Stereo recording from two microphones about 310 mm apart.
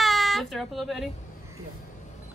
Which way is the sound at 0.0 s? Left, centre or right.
Centre.